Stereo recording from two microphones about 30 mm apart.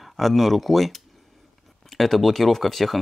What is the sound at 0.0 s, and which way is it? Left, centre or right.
Speech, centre.